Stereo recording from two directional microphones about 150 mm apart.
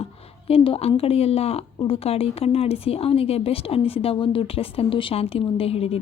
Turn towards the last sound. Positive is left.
turn(degrees=40)  # may be behind; listen again after turning